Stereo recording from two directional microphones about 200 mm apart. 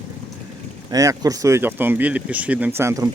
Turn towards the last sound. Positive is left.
turn(degrees=-15)  # may be behind; listen again after turning